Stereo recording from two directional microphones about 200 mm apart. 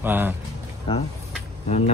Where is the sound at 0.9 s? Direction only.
25° left (ahead or behind).